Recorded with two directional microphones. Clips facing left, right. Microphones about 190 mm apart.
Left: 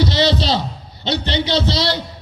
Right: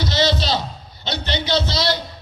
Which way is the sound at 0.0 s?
30° left (ahead or behind).